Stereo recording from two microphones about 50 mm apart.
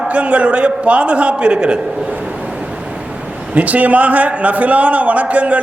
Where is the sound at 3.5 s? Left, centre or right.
Right.